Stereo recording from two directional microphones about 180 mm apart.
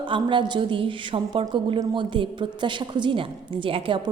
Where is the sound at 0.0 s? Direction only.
25° right (ahead or behind).